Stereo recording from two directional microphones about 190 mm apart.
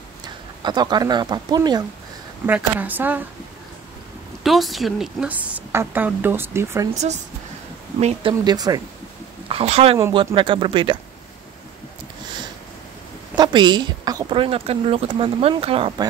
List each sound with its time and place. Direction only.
0.6 s a woman's voice: 25° right (ahead or behind)
2.4 s a woman's voice: 10° right (ahead or behind)
4.4 s a woman's voice: centre (ahead or behind)
8.0 s a woman's voice: 30° right (ahead or behind)
9.5 s a woman's voice: 30° right (ahead or behind)
13.4 s a woman's voice: 25° right (ahead or behind)